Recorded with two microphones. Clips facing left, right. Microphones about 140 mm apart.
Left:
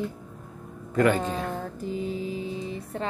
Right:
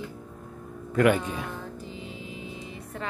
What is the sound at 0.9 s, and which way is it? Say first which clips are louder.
Speech: even; 10° right (ahead or behind).